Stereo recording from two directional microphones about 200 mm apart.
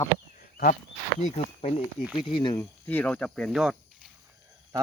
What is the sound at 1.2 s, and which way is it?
Speech, 35° left (ahead or behind).